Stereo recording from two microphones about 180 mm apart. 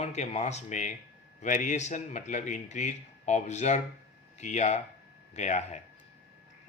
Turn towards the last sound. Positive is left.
turn(degrees=40)  # may be behind; listen again after turning